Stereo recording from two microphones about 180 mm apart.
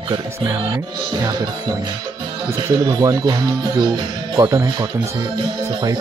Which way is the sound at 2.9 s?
20° right (ahead or behind).